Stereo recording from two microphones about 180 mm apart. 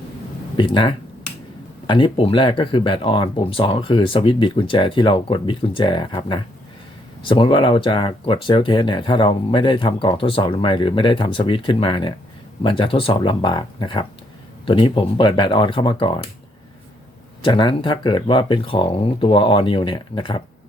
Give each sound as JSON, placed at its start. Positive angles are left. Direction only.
{"t": 0.5, "sound": "speech", "side_deg": 25}
{"t": 17.4, "sound": "speech", "side_deg": 25}